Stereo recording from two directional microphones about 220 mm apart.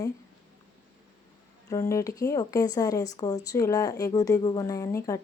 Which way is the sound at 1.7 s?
15° left (ahead or behind).